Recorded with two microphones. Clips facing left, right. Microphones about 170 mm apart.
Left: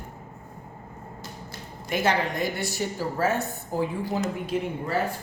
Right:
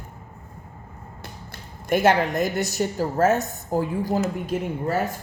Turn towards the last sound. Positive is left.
turn(degrees=-45)  # may be behind; listen again after turning